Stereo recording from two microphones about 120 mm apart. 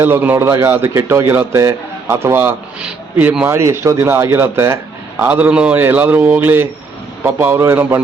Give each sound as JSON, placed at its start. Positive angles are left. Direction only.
{"t": 0.0, "sound": "a man's voice", "side_deg": -15}